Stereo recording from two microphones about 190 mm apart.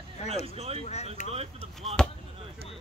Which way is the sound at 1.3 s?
30° right (ahead or behind).